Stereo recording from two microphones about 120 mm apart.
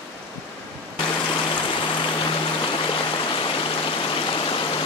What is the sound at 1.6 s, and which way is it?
Music, 40° left (ahead or behind).